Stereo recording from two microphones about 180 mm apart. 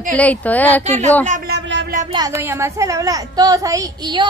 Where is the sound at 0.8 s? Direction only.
40° right (ahead or behind).